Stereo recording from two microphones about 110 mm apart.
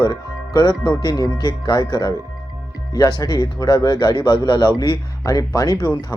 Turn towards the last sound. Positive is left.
turn(degrees=40)  # may be behind; listen again after turning